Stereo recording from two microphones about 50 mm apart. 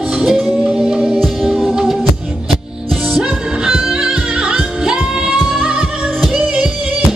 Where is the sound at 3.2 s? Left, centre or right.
Centre.